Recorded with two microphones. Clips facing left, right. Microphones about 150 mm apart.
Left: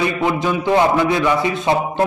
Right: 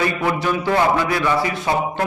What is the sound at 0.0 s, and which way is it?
A man's voice, 20° left (ahead or behind).